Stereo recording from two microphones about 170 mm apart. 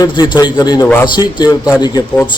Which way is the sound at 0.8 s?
15° left (ahead or behind).